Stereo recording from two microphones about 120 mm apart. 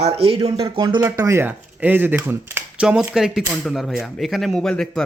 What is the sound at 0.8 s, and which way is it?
Speech, 35° right (ahead or behind).